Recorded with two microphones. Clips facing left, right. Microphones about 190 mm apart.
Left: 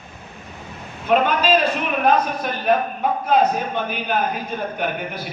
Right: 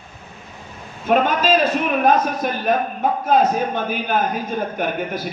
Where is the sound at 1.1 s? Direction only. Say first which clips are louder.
Right 1 dB; 45° right (ahead or behind).